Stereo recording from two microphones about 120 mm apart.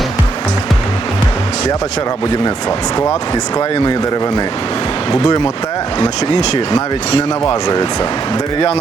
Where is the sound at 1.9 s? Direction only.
35° left (ahead or behind).